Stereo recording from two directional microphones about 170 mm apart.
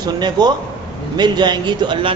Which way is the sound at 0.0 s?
25° right (ahead or behind).